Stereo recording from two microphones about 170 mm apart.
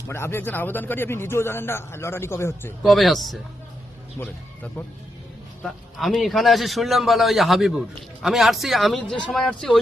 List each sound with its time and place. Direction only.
0.1 s speech: 15° left (ahead or behind)
2.8 s a man's voice: centre (ahead or behind)
4.2 s speech: 15° left (ahead or behind)
5.6 s a man's voice: centre (ahead or behind)